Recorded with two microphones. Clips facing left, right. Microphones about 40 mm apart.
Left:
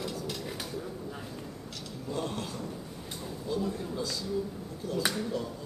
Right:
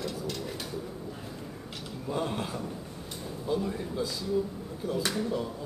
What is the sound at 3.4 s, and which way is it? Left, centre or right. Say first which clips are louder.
Speech: right 2 dB; centre.